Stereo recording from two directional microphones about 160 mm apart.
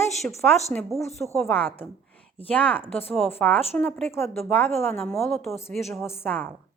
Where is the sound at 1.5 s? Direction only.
10° left (ahead or behind).